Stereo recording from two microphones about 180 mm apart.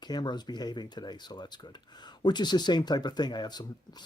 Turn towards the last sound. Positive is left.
turn(degrees=25)  # may be behind; listen again after turning